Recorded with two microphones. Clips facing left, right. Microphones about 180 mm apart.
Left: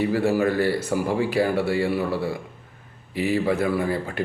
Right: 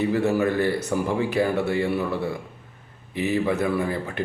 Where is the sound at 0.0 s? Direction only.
20° right (ahead or behind).